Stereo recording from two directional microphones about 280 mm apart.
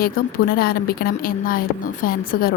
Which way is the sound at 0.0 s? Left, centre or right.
Left.